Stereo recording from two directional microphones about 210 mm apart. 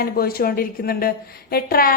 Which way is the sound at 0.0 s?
45° left (ahead or behind).